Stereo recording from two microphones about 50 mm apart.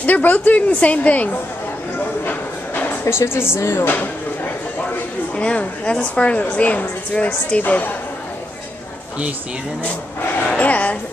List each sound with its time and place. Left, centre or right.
0.0 s a woman's voice: left
2.2 s a sound: left
3.1 s speech: left
3.8 s a woman's voice: left
5.3 s a woman's voice: left
10.6 s speech: left